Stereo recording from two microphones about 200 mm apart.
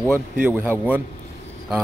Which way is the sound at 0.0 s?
5° right (ahead or behind).